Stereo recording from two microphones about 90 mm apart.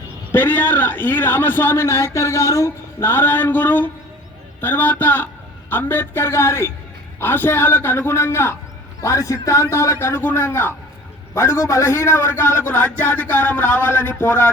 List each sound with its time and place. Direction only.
0.3 s a man's voice: 20° left (ahead or behind)